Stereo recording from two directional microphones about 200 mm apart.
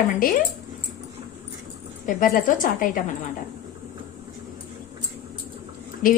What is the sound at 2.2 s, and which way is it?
Speech, 40° left (ahead or behind).